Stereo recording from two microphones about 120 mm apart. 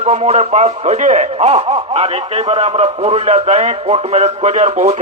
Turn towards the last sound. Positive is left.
turn(degrees=-60)  # may be behind; listen again after turning